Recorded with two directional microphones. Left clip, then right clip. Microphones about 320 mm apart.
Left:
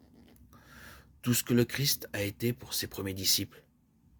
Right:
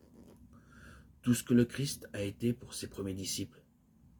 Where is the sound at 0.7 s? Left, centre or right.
Left.